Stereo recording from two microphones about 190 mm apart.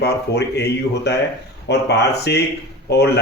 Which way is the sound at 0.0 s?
60° left (ahead or behind).